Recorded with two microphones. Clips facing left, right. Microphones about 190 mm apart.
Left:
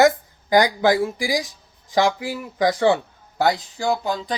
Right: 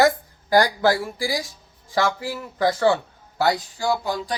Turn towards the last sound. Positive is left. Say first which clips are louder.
# left 1 dB
turn(degrees=20)  # may be behind; listen again after turning